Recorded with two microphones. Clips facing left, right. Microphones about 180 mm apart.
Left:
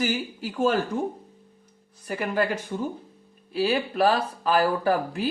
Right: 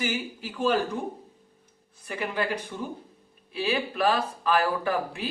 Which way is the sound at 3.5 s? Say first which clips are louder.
Left 4 dB; 40° left (ahead or behind).